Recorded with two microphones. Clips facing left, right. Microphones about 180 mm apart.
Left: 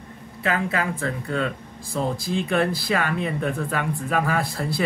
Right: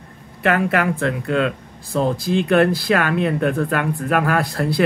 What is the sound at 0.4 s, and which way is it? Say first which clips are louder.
A man's voice: right 6 dB; 65° right (ahead or behind).